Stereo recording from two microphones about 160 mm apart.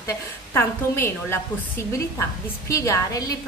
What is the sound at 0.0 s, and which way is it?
A woman's voice, 15° left (ahead or behind).